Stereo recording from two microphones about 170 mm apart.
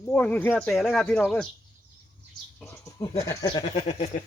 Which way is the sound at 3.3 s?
25° left (ahead or behind).